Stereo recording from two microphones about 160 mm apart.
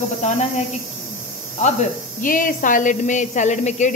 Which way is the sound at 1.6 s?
50° left (ahead or behind).